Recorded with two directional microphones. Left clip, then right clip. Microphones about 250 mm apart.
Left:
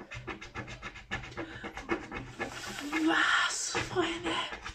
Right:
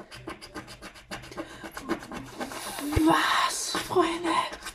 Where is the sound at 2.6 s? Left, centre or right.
Centre.